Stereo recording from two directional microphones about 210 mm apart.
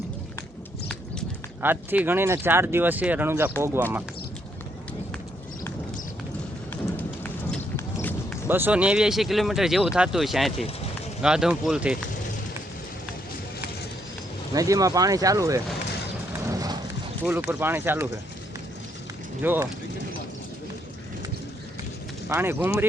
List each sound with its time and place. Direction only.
1.6 s speech: 10° right (ahead or behind)
6.9 s run: 10° left (ahead or behind)
8.4 s speech: 10° right (ahead or behind)
14.5 s speech: 15° right (ahead or behind)
16.5 s clip-clop: 15° right (ahead or behind)
17.2 s speech: 10° right (ahead or behind)
19.4 s speech: 10° right (ahead or behind)
22.3 s speech: 10° right (ahead or behind)